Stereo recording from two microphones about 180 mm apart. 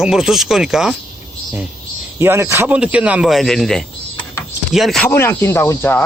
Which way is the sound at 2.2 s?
15° right (ahead or behind).